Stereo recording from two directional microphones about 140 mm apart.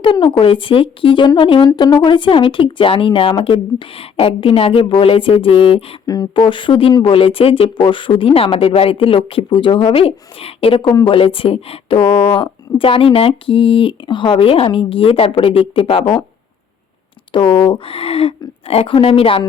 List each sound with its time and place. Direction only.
0.0 s speech: 35° left (ahead or behind)
6.1 s speech: 25° left (ahead or behind)
17.3 s speech: 35° left (ahead or behind)